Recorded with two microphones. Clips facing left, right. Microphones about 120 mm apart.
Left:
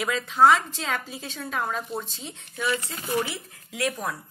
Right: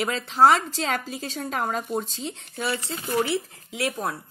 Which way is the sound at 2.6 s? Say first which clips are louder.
Left 1 dB; 35° right (ahead or behind).